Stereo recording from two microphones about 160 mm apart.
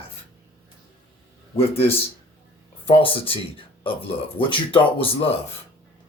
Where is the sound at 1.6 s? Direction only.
40° left (ahead or behind).